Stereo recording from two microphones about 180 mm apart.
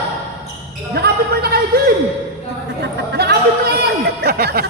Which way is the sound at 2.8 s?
65° right (ahead or behind).